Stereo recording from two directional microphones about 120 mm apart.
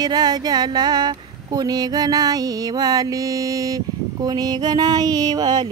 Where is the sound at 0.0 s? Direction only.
35° right (ahead or behind).